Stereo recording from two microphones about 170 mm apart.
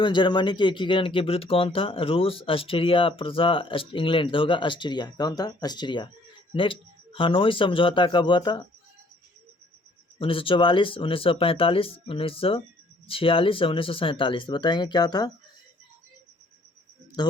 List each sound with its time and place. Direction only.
0.0 s speech: 30° left (ahead or behind)
10.2 s speech: 30° left (ahead or behind)
17.2 s speech: 25° left (ahead or behind)